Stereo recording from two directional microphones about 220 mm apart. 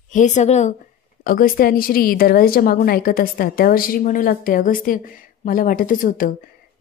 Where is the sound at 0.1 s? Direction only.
35° left (ahead or behind).